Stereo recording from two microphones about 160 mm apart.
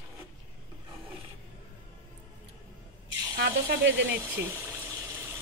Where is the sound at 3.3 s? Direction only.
90° right.